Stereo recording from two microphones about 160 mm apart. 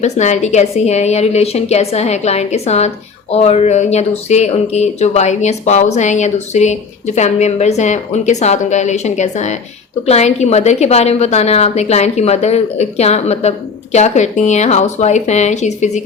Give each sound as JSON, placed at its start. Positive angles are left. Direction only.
{"t": 0.0, "sound": "a woman's voice", "side_deg": 45}